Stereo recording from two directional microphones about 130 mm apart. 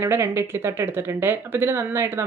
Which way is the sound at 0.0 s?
20° right (ahead or behind).